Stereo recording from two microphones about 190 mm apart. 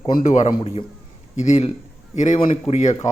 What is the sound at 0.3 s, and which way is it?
Speech, 35° left (ahead or behind).